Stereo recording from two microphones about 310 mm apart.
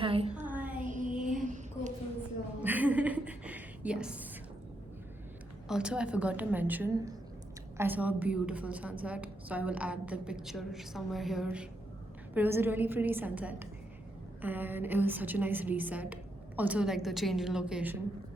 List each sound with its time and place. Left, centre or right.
0.0 s child singing: centre
0.4 s child singing: centre
0.8 s child singing: right
1.4 s a sound: right
2.6 s a sound: centre
5.6 s a woman's voice: centre